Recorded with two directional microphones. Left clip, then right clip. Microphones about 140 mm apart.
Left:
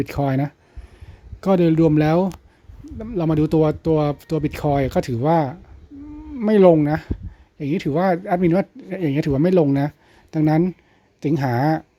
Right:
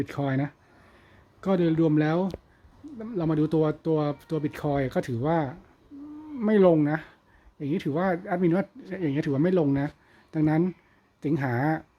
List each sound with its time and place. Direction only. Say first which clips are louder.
0.0 s speech: left 7 dB; 35° left (ahead or behind)